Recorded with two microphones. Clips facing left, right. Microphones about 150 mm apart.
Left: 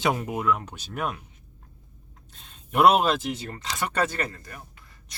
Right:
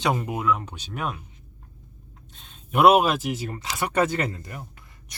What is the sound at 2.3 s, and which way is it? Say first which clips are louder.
Speech: right 1 dB; centre (ahead or behind).